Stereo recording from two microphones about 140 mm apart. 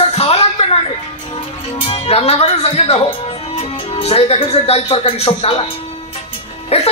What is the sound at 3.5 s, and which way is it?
Speech, 45° left (ahead or behind).